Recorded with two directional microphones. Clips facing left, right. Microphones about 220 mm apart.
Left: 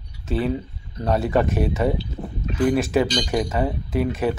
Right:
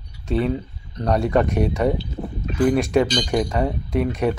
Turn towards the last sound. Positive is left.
turn(degrees=0)  # may be behind; listen again after turning